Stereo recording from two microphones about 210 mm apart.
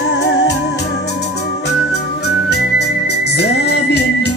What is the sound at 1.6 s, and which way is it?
Music, 50° left (ahead or behind).